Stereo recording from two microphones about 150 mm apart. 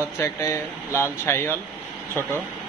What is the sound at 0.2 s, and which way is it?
Speech, 20° left (ahead or behind).